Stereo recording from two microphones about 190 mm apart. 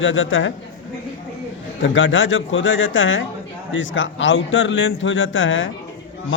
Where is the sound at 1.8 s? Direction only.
75° left (ahead or behind).